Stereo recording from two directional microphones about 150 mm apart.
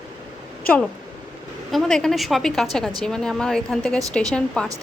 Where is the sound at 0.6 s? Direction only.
10° left (ahead or behind).